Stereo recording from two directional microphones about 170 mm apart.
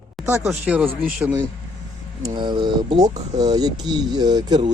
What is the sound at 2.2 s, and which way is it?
Speech, 25° right (ahead or behind).